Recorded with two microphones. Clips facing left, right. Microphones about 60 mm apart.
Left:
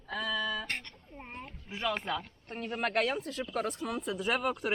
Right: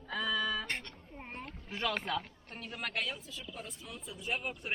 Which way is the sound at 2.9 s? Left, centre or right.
Left.